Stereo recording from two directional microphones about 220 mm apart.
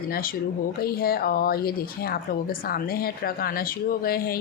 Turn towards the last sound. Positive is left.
turn(degrees=45)  # may be behind; listen again after turning